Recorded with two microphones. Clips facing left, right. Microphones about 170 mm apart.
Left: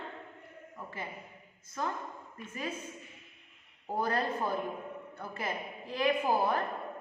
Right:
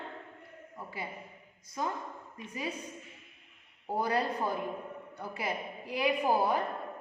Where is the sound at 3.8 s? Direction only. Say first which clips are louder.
Right 1 dB; 10° right (ahead or behind).